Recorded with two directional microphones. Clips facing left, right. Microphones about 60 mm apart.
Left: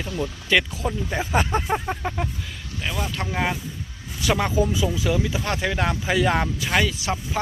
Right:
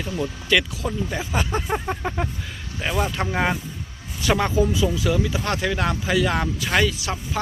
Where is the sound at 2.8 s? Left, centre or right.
Right.